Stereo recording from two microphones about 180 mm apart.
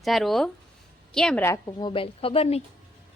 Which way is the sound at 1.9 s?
30° left (ahead or behind).